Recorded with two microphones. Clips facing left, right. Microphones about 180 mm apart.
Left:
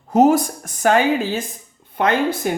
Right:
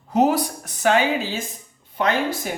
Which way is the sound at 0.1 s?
45° left (ahead or behind).